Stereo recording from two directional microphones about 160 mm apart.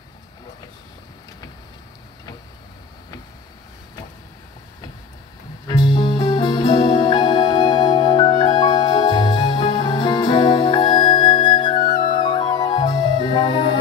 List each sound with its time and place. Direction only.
5.7 s music: 30° left (ahead or behind)